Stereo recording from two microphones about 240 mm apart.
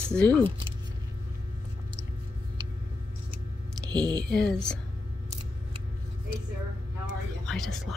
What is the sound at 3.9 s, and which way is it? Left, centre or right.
Speech, centre.